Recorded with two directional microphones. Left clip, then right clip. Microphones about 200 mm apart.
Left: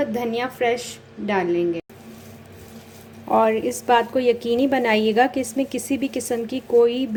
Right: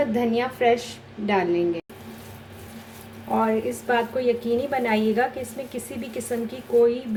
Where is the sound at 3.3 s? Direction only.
35° left (ahead or behind).